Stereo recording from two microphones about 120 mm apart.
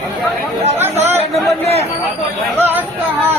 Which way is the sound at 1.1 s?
60° right (ahead or behind).